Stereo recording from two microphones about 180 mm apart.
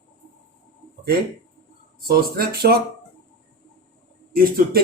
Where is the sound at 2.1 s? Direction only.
60° right (ahead or behind).